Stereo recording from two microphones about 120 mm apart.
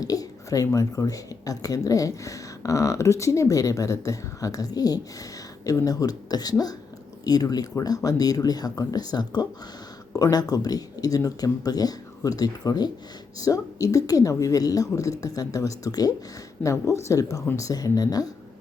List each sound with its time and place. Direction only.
0.0 s speech: 30° left (ahead or behind)
17.4 s speech: 15° left (ahead or behind)
17.7 s speech: 30° left (ahead or behind)